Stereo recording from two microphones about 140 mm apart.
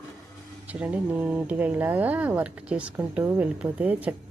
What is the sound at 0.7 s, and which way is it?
Speech, 10° right (ahead or behind).